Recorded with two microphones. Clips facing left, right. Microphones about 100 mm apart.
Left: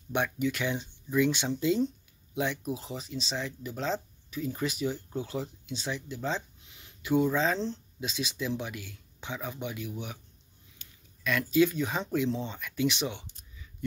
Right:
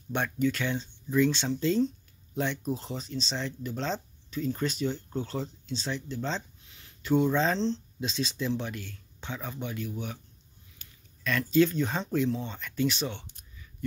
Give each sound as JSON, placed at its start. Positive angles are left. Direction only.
{"t": 0.1, "sound": "speech", "side_deg": 15}
{"t": 10.8, "sound": "a sound", "side_deg": -40}
{"t": 11.2, "sound": "speech", "side_deg": 10}
{"t": 12.3, "sound": "speech", "side_deg": 20}
{"t": 12.5, "sound": "speech", "side_deg": 10}